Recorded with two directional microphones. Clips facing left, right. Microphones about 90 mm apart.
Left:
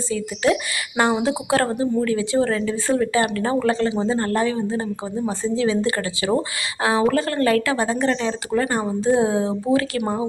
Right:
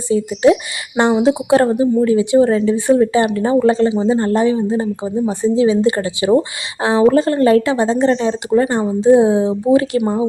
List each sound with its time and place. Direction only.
0.1 s speech: 20° right (ahead or behind)